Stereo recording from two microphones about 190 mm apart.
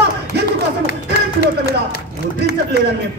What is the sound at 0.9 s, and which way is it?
Speech, 50° left (ahead or behind).